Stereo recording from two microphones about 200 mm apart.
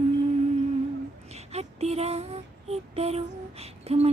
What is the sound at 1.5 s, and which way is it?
Music, 30° right (ahead or behind).